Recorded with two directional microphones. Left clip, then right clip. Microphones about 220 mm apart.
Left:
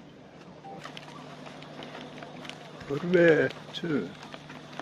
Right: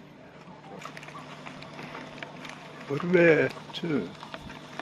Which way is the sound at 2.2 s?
20° right (ahead or behind).